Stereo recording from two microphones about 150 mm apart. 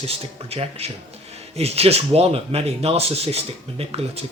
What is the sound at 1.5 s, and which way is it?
Speech, 45° right (ahead or behind).